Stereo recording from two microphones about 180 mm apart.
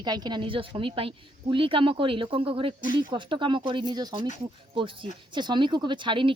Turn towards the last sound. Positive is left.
turn(degrees=-25)  # may be behind; listen again after turning